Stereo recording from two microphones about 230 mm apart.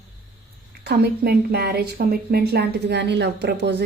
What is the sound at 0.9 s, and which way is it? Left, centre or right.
A woman's voice, right.